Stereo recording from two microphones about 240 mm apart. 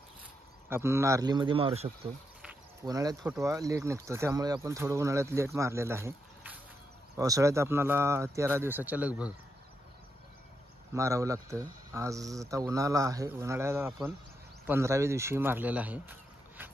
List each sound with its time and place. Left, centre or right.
0.7 s speech: centre
11.0 s speech: centre